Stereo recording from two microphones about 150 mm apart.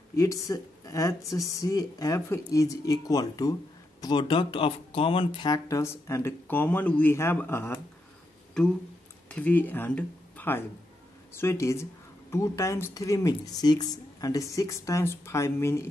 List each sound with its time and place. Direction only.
0.1 s speech: 25° left (ahead or behind)
9.3 s speech: 10° left (ahead or behind)